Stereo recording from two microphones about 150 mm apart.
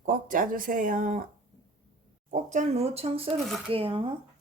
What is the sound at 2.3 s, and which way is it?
Speech, 55° right (ahead or behind).